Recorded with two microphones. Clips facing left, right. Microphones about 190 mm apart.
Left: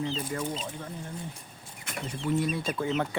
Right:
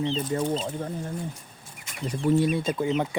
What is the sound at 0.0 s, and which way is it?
Speech, 30° right (ahead or behind).